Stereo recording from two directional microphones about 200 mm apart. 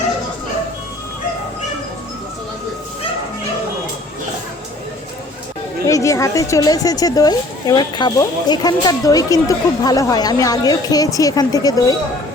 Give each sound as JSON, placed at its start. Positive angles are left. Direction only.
{"t": 5.8, "sound": "speech", "side_deg": 15}